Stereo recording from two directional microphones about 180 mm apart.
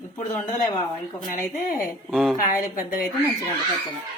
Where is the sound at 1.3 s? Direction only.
50° left (ahead or behind).